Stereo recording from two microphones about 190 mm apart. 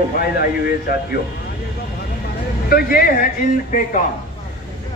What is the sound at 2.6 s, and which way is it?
A man's voice, 50° left (ahead or behind).